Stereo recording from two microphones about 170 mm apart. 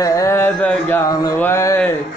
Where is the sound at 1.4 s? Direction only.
15° left (ahead or behind).